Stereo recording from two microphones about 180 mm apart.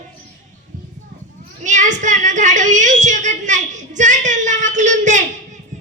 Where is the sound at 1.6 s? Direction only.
45° right (ahead or behind).